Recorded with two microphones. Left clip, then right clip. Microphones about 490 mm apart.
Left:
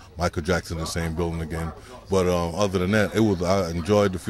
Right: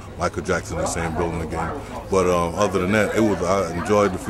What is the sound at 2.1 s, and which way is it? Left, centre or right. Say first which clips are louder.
A man's voice: right 3 dB; left.